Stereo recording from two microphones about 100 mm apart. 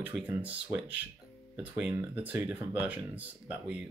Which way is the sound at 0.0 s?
15° right (ahead or behind).